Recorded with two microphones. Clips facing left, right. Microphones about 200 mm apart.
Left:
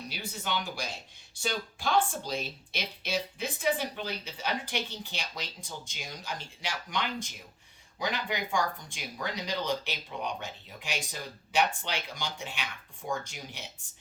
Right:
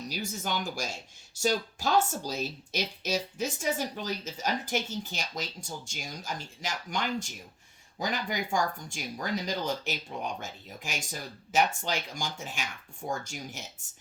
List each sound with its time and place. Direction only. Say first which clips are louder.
0.1 s speech: right 1 dB; 45° right (ahead or behind)